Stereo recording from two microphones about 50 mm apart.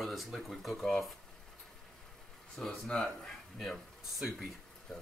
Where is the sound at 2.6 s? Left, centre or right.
Left.